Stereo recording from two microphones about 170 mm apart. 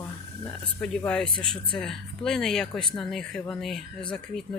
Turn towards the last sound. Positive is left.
turn(degrees=5)  # may be behind; listen again after turning